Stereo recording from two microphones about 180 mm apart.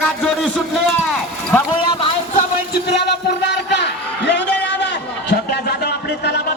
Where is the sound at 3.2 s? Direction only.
70° left (ahead or behind).